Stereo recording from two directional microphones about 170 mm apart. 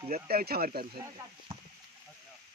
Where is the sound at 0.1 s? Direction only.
60° right (ahead or behind).